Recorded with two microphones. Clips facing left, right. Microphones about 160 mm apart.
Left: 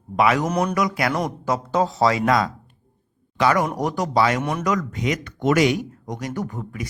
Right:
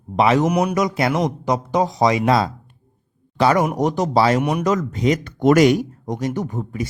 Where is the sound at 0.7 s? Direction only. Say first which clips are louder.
Right 3 dB; 25° right (ahead or behind).